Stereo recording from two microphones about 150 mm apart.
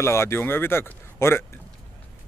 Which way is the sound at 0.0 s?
15° left (ahead or behind).